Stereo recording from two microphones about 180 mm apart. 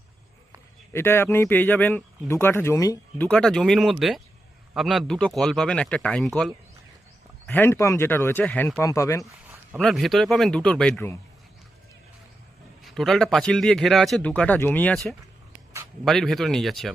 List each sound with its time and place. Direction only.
0.9 s speech: 15° left (ahead or behind)
3.2 s a man's voice: 5° left (ahead or behind)
9.5 s a man's voice: centre (ahead or behind)
12.8 s a man's voice: centre (ahead or behind)